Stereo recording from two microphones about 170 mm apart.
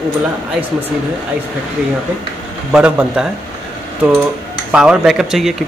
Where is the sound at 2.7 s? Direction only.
5° right (ahead or behind).